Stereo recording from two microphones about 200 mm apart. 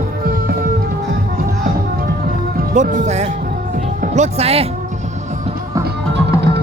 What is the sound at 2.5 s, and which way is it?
Speech, 40° right (ahead or behind).